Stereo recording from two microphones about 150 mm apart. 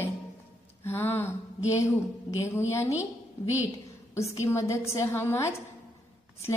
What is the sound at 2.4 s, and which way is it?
Speech, 20° left (ahead or behind).